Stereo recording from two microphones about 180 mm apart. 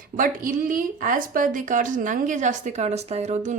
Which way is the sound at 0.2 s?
50° right (ahead or behind).